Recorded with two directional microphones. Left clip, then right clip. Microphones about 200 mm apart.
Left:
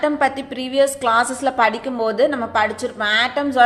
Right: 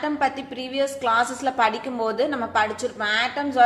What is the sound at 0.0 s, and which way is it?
A woman's voice, 20° left (ahead or behind).